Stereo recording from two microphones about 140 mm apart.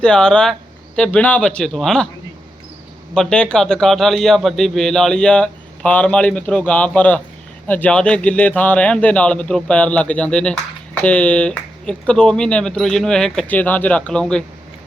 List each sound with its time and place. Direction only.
0.0 s a man's voice: 5° left (ahead or behind)
3.2 s a man's voice: 5° left (ahead or behind)